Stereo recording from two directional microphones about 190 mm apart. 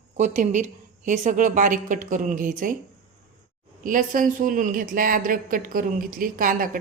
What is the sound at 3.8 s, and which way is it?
Speech, 45° right (ahead or behind).